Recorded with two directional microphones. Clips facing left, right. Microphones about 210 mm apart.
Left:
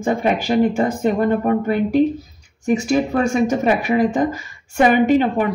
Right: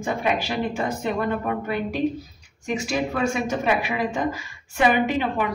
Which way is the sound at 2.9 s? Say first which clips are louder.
Left 5 dB; 45° left (ahead or behind).